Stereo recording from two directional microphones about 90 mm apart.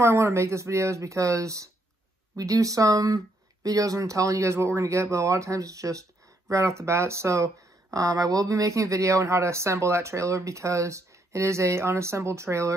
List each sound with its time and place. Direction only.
0.0 s speech: 30° right (ahead or behind)